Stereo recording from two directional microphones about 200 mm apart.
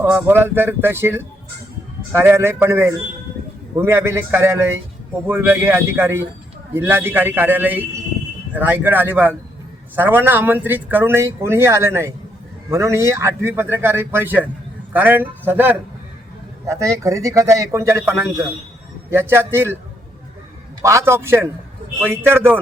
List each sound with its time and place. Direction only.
0.0 s speech: 10° right (ahead or behind)
20.8 s speech: 15° right (ahead or behind)